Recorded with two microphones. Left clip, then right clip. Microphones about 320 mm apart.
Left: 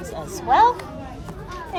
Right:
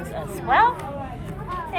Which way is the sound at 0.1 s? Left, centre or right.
Centre.